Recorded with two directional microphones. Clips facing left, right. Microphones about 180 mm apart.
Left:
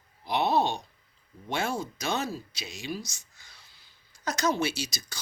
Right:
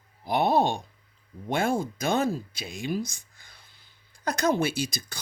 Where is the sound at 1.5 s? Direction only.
55° right (ahead or behind).